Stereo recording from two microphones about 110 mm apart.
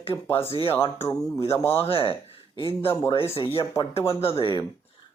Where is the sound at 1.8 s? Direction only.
55° left (ahead or behind).